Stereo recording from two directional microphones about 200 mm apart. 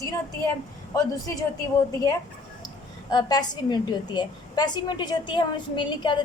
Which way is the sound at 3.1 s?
20° left (ahead or behind).